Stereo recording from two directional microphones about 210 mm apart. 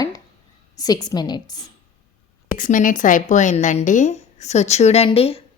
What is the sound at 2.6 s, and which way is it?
A woman's voice, 40° left (ahead or behind).